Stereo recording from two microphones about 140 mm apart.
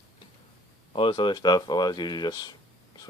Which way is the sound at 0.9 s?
40° left (ahead or behind).